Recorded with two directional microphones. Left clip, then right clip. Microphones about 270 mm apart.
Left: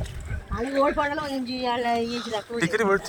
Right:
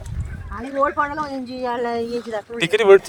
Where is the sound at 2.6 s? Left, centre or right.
Right.